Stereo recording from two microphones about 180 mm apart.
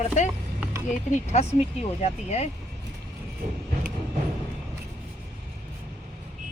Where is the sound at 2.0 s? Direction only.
35° left (ahead or behind).